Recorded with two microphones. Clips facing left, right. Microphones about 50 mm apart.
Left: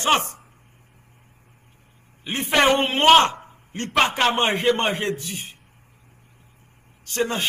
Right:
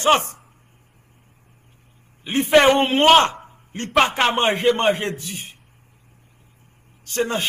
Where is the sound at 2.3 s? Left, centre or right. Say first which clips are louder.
Right 4 dB; right.